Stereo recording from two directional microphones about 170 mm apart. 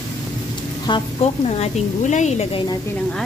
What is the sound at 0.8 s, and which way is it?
Speech, 35° left (ahead or behind).